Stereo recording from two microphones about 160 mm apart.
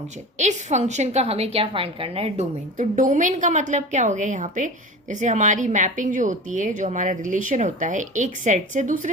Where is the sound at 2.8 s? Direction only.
50° right (ahead or behind).